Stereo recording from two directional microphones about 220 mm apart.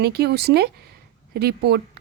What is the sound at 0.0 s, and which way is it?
Speech, 45° right (ahead or behind).